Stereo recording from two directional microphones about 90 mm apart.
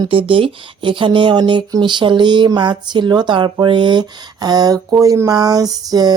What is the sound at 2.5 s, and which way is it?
Speech, 60° right (ahead or behind).